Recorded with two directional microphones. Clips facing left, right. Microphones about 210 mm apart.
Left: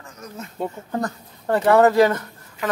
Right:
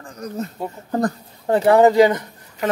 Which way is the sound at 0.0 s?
35° right (ahead or behind).